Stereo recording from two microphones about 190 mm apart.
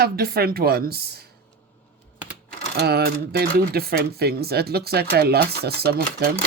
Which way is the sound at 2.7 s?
55° right (ahead or behind).